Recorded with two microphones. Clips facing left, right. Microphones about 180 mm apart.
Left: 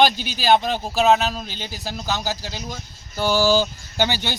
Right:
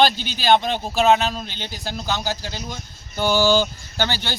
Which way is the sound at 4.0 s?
15° left (ahead or behind).